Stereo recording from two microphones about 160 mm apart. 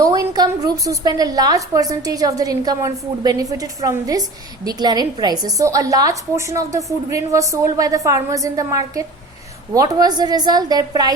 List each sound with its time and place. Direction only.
0.0 s a woman's voice: 20° right (ahead or behind)